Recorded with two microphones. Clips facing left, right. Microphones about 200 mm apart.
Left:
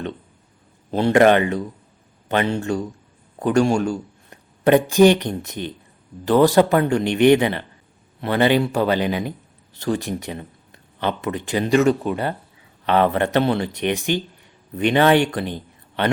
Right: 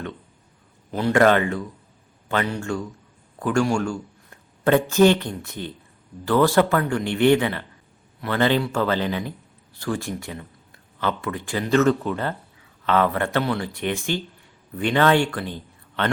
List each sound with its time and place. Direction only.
0.9 s a man's voice: 30° left (ahead or behind)